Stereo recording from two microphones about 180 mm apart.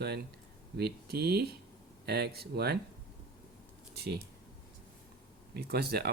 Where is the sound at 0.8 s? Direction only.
65° right (ahead or behind).